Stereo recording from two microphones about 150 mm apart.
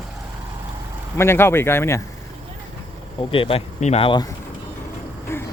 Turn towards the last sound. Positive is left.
turn(degrees=15)  # may be behind; listen again after turning